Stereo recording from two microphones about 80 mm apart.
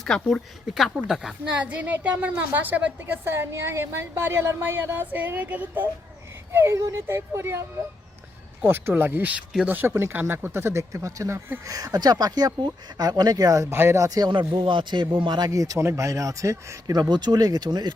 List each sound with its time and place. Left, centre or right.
0.0 s speech: centre
1.5 s speech: centre
3.2 s speech: right
6.5 s speech: right
8.6 s speech: right
14.3 s a man's voice: right
15.2 s speech: right
15.4 s speech: right